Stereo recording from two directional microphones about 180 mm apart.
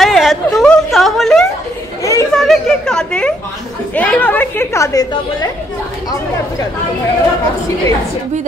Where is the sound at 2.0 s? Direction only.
15° left (ahead or behind).